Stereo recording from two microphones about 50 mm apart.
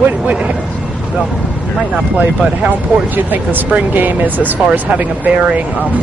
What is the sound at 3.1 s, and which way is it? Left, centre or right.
Speech, right.